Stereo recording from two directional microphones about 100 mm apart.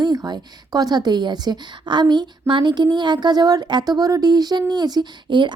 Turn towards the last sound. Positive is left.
turn(degrees=-50)  # may be behind; listen again after turning